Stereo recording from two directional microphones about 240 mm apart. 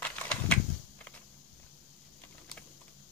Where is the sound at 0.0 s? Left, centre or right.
Centre.